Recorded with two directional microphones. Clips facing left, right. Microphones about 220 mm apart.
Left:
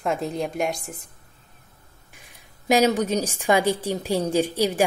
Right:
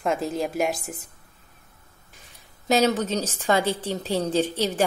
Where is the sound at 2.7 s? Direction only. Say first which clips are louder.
Left 2 dB; 10° left (ahead or behind).